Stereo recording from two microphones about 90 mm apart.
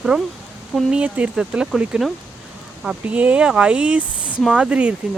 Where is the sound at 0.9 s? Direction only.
10° right (ahead or behind).